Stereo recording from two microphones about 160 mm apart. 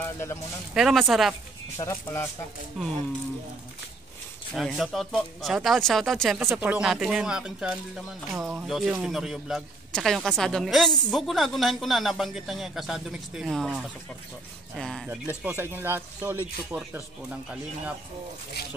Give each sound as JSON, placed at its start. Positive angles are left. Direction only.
{"t": 0.0, "sound": "speech", "side_deg": 15}
{"t": 0.7, "sound": "speech", "side_deg": 0}
{"t": 1.8, "sound": "speech", "side_deg": 20}
{"t": 2.8, "sound": "speech", "side_deg": 0}
{"t": 4.6, "sound": "speech", "side_deg": 0}
{"t": 15.0, "sound": "speech", "side_deg": -15}